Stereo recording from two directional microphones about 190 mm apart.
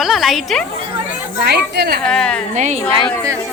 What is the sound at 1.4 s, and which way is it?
Speech, 60° right (ahead or behind).